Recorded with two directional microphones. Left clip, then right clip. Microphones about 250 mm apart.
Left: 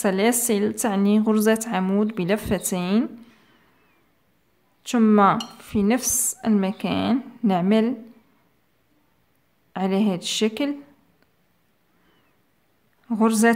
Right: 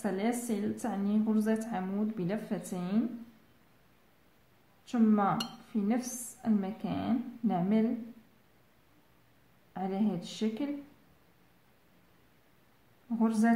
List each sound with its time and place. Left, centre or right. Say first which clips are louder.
0.0 s a woman's voice: left 12 dB; left
4.8 s a woman's voice: left 12 dB; left
9.7 s a woman's voice: left 11 dB; left
13.2 s a woman's voice: left 11 dB; left